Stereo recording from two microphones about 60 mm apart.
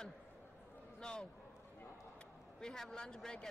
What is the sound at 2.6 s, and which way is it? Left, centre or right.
Speech, centre.